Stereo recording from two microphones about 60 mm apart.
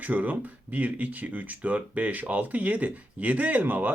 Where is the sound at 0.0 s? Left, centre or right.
Right.